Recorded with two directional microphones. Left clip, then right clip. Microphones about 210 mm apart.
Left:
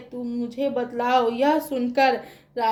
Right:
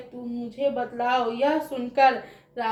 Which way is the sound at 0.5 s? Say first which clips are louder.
Even; 45° left (ahead or behind).